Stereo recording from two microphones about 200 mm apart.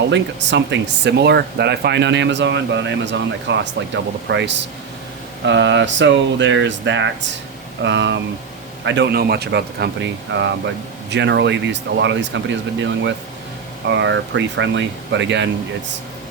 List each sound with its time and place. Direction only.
0.1 s speech: 65° right (ahead or behind)